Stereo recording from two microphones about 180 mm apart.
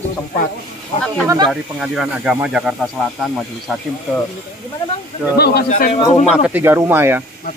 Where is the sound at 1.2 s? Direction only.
15° right (ahead or behind).